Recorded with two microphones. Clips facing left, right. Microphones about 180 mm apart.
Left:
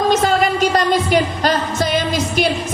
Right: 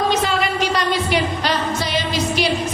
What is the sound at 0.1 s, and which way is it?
Music, 45° left (ahead or behind).